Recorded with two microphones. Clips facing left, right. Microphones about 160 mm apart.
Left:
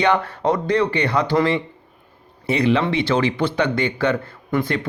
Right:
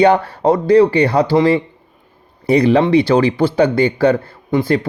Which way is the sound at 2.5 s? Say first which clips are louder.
Right 7 dB; 40° right (ahead or behind).